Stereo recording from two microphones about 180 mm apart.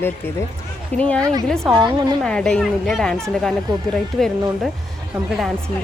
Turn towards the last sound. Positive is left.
turn(degrees=0)  # may be behind; listen again after turning